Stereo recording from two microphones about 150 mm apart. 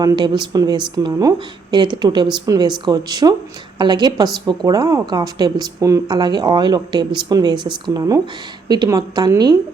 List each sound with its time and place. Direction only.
0.0 s speech: 25° right (ahead or behind)